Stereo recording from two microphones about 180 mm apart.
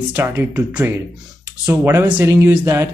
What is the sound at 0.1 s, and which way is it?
Speech, 15° right (ahead or behind).